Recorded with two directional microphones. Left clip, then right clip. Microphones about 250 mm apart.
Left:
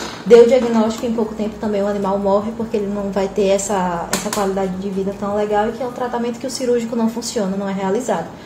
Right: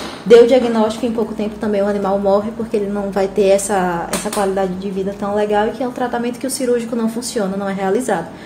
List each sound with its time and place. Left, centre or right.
0.3 s a woman's voice: centre